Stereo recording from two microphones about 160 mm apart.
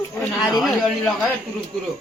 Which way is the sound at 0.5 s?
Centre (ahead or behind).